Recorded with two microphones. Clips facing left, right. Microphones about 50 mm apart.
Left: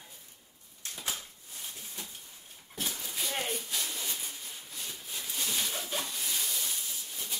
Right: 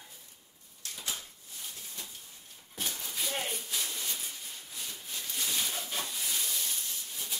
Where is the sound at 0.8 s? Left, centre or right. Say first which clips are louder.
Left 1 dB; left.